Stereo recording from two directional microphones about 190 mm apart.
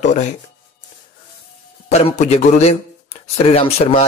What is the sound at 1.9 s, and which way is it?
A man's voice, 35° left (ahead or behind).